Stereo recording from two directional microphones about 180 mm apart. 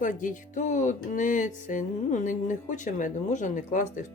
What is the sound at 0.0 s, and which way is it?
Speech, 45° left (ahead or behind).